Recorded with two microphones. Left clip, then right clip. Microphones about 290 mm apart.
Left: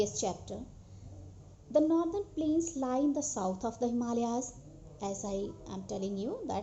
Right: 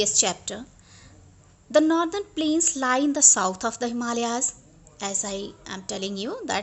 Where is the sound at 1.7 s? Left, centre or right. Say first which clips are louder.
Right 8 dB; right.